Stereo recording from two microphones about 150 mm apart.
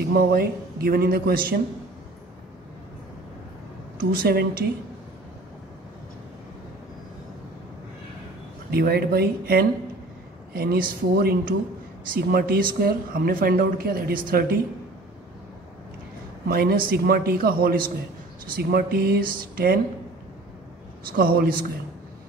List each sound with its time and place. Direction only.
0.1 s speech: 75° right (ahead or behind)
4.0 s speech: 80° right
8.6 s speech: 90° right
16.4 s speech: 85° right
18.5 s speech: 90° right
21.2 s speech: 75° right (ahead or behind)